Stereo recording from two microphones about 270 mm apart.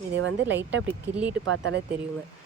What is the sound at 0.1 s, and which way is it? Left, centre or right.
Speech, right.